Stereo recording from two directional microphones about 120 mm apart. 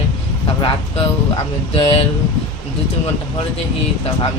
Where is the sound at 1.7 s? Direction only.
50° left (ahead or behind).